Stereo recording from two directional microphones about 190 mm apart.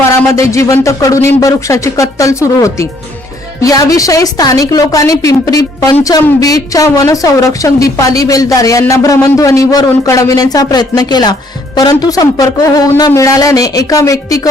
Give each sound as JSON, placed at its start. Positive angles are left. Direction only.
{"t": 0.1, "sound": "a woman's voice", "side_deg": 15}